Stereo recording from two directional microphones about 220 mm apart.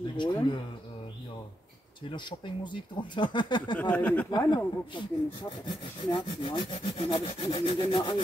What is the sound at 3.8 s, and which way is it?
Speech, 5° left (ahead or behind).